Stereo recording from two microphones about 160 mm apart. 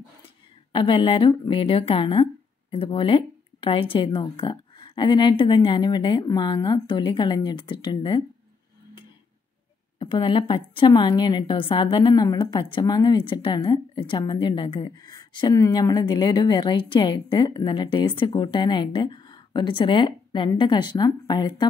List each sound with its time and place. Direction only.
0.7 s a woman's voice: 30° left (ahead or behind)
9.9 s a woman's voice: 30° left (ahead or behind)